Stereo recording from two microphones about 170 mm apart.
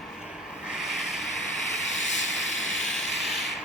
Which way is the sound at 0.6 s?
Centre (ahead or behind).